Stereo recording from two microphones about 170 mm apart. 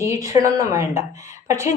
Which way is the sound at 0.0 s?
15° right (ahead or behind).